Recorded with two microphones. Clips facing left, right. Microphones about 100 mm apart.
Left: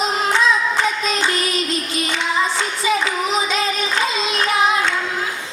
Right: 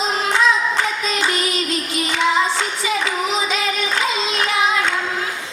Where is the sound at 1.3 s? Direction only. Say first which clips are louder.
Even; 20° right (ahead or behind).